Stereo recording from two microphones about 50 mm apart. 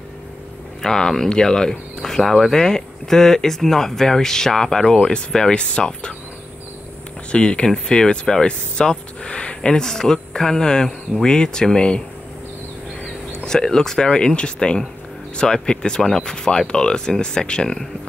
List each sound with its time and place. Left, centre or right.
0.8 s speech: centre
7.2 s speech: left
13.5 s speech: centre